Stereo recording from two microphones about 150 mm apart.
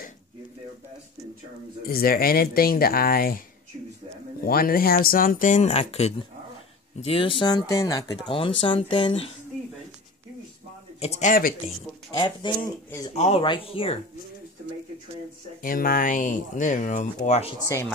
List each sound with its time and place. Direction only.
1.9 s speech: 80° left
4.5 s speech: 80° left; by 8.0 s 20° left (ahead or behind)
8.3 s speech: 35° left (ahead or behind)
11.0 s a man's voice: 50° left (ahead or behind)
12.1 s speech: 25° left (ahead or behind)
13.1 s a man's voice: 45° left (ahead or behind)
15.6 s speech: 70° left (ahead or behind); by 17.5 s 50° left (ahead or behind)